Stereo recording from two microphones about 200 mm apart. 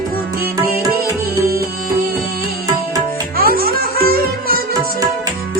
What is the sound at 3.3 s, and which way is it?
Music, 50° right (ahead or behind).